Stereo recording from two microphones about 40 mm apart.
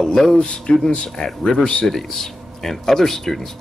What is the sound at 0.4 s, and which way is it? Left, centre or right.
Speech, left.